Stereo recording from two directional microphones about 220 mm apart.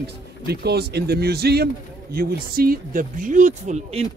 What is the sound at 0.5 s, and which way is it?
A man's voice, 50° right (ahead or behind).